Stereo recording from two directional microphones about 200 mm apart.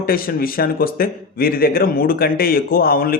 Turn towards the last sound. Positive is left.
turn(degrees=45)  # may be behind; listen again after turning